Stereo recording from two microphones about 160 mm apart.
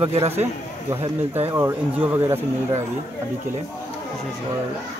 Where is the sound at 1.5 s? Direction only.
15° right (ahead or behind).